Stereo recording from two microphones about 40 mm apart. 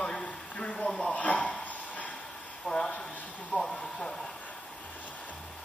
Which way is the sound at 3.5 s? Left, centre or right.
Left.